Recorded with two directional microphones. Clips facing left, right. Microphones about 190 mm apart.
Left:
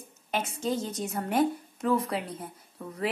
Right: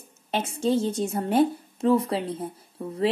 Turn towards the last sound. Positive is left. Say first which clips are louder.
# right 7 dB
turn(degrees=-30)  # may be behind; listen again after turning